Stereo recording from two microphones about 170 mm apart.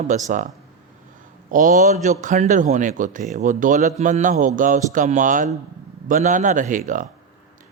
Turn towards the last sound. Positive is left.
turn(degrees=-50)  # may be behind; listen again after turning